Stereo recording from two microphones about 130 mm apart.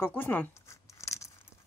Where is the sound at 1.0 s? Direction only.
25° left (ahead or behind).